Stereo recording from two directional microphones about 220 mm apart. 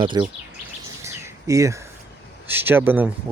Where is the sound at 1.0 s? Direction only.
15° right (ahead or behind).